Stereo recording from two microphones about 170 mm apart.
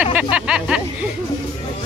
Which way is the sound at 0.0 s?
10° right (ahead or behind).